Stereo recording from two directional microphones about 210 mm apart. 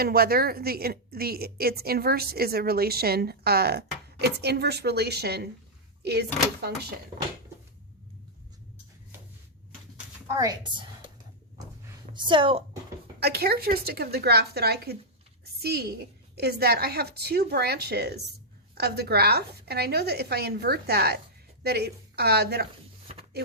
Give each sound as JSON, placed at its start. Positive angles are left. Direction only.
{"t": 0.0, "sound": "a woman's voice", "side_deg": -45}
{"t": 10.3, "sound": "a woman's voice", "side_deg": -15}
{"t": 12.1, "sound": "a woman's voice", "side_deg": -20}
{"t": 13.1, "sound": "a woman's voice", "side_deg": -50}